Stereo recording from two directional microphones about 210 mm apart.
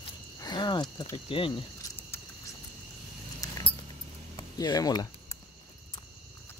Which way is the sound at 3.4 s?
15° left (ahead or behind).